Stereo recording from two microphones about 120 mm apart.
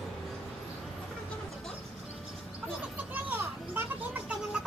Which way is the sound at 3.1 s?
15° right (ahead or behind).